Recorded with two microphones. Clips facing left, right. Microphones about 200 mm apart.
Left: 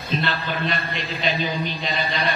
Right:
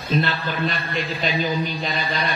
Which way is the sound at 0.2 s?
45° right (ahead or behind).